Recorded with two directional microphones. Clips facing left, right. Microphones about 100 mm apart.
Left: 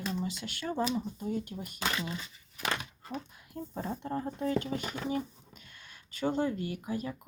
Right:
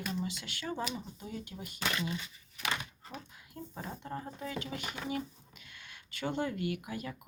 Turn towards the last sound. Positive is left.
turn(degrees=35)  # may be behind; listen again after turning